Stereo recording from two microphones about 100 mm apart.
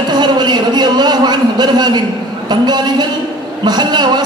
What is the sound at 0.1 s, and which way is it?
A man's voice, 45° right (ahead or behind).